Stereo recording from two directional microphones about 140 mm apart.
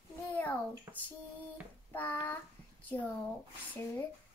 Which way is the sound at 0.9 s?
20° right (ahead or behind).